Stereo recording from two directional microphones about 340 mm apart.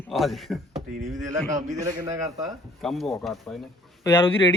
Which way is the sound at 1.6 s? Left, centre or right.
Right.